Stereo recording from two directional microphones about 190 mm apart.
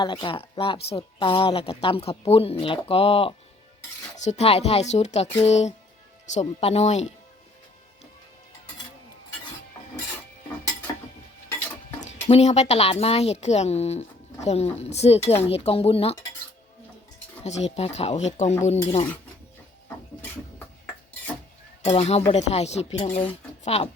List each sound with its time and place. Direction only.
0.0 s a woman's voice: 25° left (ahead or behind)
12.3 s speech: 35° left (ahead or behind)
17.4 s speech: 35° left (ahead or behind)
21.8 s speech: 35° left (ahead or behind)